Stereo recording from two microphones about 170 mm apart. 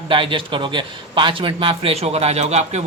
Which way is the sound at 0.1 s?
30° right (ahead or behind).